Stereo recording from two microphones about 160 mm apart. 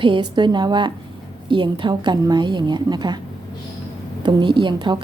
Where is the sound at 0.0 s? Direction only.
30° right (ahead or behind).